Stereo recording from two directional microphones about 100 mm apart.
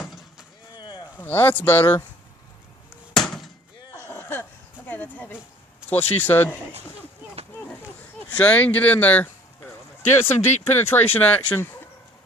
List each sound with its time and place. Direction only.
0.0 s vehicle: centre (ahead or behind)
0.7 s a sound: 45° left (ahead or behind)
1.2 s speech: 20° left (ahead or behind)
3.2 s chop: 5° left (ahead or behind)
3.9 s a sound: 20° left (ahead or behind)
4.9 s speech: 15° left (ahead or behind)
8.3 s speech: 15° left (ahead or behind)